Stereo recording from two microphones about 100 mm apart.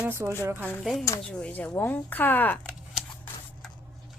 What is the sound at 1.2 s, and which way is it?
A woman's voice, 10° left (ahead or behind).